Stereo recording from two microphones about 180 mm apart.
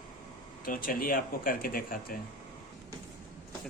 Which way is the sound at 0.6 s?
50° left (ahead or behind).